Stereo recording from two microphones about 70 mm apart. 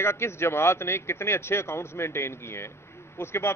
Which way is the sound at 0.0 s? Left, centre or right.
Left.